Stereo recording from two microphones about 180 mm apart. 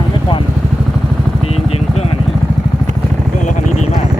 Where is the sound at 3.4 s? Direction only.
45° left (ahead or behind).